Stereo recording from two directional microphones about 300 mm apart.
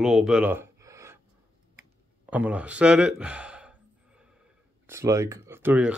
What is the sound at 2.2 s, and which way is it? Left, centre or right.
Speech, centre.